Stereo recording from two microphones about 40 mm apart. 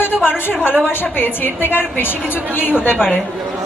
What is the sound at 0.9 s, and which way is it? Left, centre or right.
A woman's voice, left.